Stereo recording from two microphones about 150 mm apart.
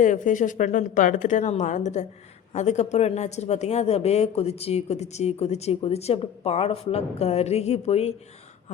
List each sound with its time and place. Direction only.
0.0 s speech: 55° left (ahead or behind)